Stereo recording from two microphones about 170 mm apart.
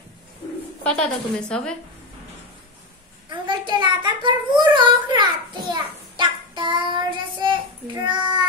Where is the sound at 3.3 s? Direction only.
25° right (ahead or behind).